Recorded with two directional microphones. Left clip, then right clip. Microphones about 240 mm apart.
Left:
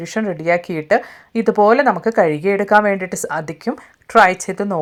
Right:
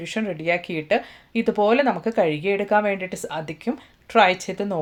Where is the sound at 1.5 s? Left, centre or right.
Left.